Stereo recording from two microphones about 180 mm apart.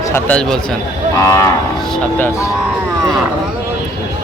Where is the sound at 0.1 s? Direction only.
5° left (ahead or behind).